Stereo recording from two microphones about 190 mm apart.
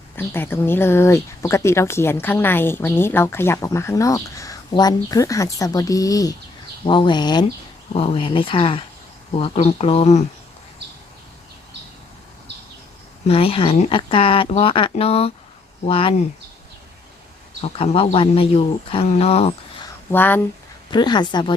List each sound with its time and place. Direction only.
0.2 s speech: 10° left (ahead or behind); by 10.2 s 35° left (ahead or behind)
13.2 s speech: 30° left (ahead or behind)
17.6 s speech: 30° left (ahead or behind)
20.1 s speech: 10° left (ahead or behind)
20.9 s speech: 25° left (ahead or behind)